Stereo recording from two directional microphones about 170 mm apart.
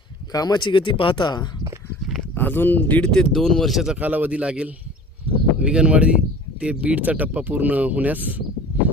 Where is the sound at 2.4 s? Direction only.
10° left (ahead or behind); by 8.4 s 10° right (ahead or behind).